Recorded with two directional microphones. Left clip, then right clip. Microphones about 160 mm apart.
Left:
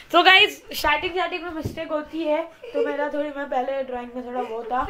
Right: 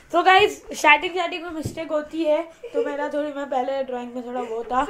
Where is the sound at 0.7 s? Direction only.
25° right (ahead or behind).